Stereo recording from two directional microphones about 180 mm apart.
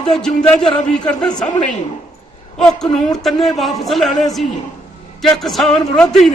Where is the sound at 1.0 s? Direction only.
25° left (ahead or behind).